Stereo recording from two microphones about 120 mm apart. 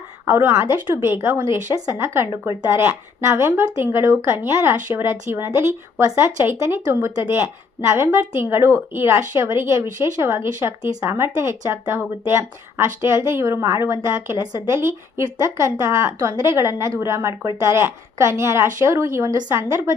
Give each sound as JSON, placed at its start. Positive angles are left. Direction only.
{"t": 0.3, "sound": "speech", "side_deg": -20}